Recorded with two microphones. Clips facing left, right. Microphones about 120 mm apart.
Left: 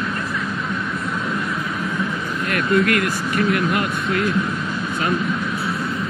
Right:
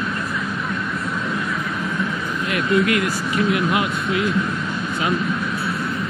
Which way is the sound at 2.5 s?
50° left (ahead or behind).